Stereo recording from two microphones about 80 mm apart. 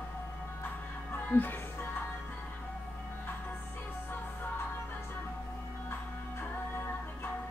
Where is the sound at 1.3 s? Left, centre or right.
Left.